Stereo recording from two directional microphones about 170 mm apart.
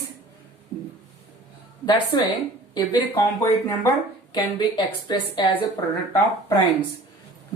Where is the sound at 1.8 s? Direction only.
30° left (ahead or behind).